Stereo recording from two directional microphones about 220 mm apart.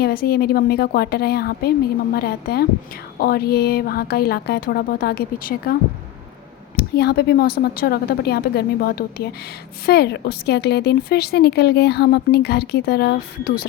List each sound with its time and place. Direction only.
0.0 s a woman's voice: 45° left (ahead or behind)
6.7 s a woman's voice: 45° left (ahead or behind)